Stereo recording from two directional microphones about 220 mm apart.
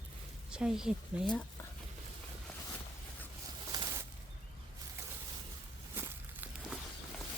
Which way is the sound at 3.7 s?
15° right (ahead or behind).